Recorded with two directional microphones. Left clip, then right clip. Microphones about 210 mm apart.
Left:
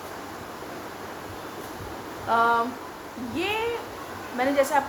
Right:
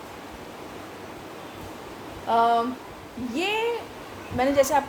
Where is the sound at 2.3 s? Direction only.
35° right (ahead or behind).